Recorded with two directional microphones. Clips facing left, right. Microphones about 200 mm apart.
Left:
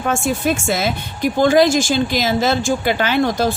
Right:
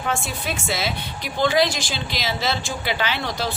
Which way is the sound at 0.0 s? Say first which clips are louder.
Left 8 dB; 50° left (ahead or behind).